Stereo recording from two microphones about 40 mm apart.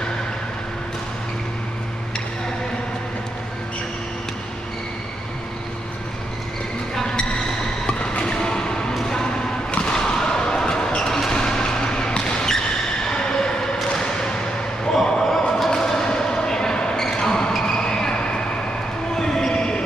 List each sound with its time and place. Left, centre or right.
7.8 s basketball bounce: left
9.9 s basketball bounce: centre
13.2 s a sound: centre
15.7 s basketball bounce: centre
17.6 s a sound: centre
19.1 s train: centre